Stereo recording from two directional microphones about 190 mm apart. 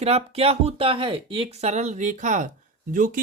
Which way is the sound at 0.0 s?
30° right (ahead or behind).